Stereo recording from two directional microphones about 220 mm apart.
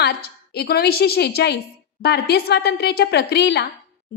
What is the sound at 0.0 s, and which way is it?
A woman's voice, 45° left (ahead or behind).